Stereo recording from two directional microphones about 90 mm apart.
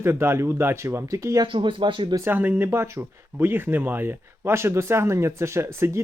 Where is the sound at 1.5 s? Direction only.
65° right (ahead or behind).